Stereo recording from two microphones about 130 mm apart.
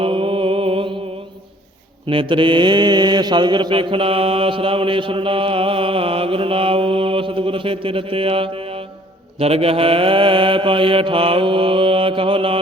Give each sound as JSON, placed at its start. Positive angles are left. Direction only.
{"t": 0.0, "sound": "music", "side_deg": -40}
{"t": 2.0, "sound": "mantra", "side_deg": -40}